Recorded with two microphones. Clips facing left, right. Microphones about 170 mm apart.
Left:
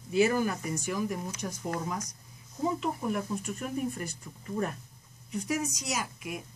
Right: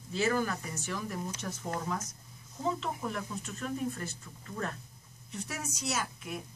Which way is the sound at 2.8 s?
10° left (ahead or behind).